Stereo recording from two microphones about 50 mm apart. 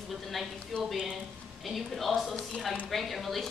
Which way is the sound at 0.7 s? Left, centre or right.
Left.